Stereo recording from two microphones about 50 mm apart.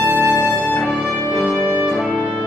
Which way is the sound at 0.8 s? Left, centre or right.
Centre.